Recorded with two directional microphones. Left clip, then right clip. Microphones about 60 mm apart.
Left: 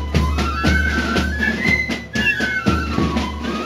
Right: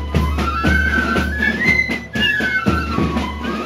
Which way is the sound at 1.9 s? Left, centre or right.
Left.